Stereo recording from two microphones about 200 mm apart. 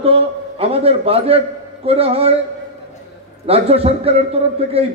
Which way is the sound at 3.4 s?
30° right (ahead or behind).